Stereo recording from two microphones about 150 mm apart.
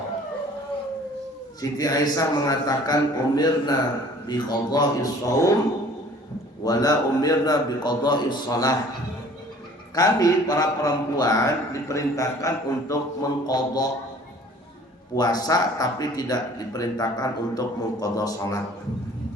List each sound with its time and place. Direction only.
1.8 s speech: 25° left (ahead or behind)
6.7 s speech: 25° left (ahead or behind)
9.9 s speech: 25° left (ahead or behind)
15.1 s speech: 25° left (ahead or behind)